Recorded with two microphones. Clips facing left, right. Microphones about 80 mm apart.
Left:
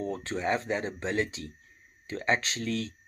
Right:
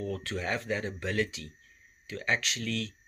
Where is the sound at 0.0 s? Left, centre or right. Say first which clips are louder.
Left 3 dB; left.